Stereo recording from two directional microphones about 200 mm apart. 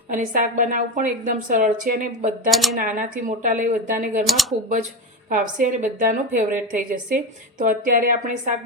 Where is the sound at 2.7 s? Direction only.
40° right (ahead or behind).